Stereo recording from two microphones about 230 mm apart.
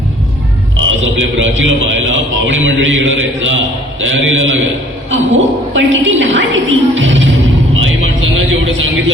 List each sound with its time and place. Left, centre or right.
0.9 s a man's voice: right
5.7 s a woman's voice: right
7.8 s vehicle: right